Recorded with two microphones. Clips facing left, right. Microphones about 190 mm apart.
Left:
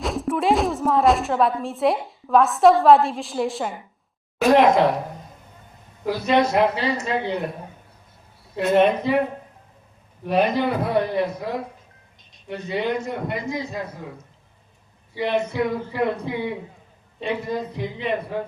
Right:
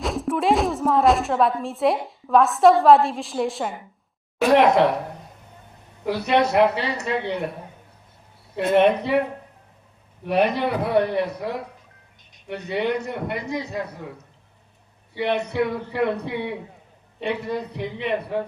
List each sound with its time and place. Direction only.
0.0 s a woman's voice: centre (ahead or behind)
4.5 s a man's voice: 65° right (ahead or behind)
6.1 s a man's voice: 65° right (ahead or behind)
8.5 s a man's voice: 60° right (ahead or behind)
10.2 s a man's voice: 65° right (ahead or behind)
15.1 s a man's voice: 65° right (ahead or behind)